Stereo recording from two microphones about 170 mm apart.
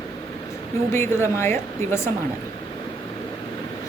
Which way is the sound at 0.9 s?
15° left (ahead or behind).